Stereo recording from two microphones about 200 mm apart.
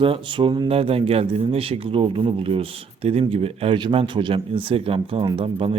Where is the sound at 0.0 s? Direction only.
25° right (ahead or behind).